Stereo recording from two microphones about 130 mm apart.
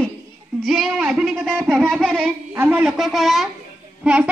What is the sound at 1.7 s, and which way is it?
Music, 5° left (ahead or behind).